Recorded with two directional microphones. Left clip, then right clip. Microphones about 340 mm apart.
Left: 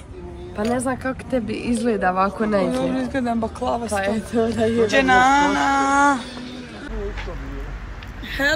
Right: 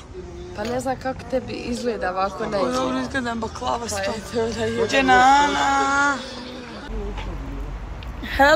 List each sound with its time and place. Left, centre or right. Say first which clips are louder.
0.7 s speech: left 1 dB; centre
2.7 s speech: even; centre
3.9 s speech: left 3 dB; left
4.8 s speech: right 1 dB; centre
8.4 s speech: right 5 dB; centre